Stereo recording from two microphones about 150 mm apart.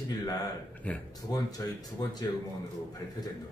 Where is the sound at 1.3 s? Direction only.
25° left (ahead or behind).